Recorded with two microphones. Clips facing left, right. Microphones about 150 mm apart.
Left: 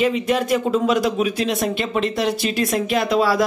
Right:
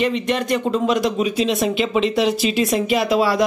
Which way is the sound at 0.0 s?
5° left (ahead or behind).